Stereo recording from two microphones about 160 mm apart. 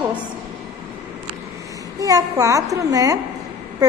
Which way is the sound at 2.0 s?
20° right (ahead or behind).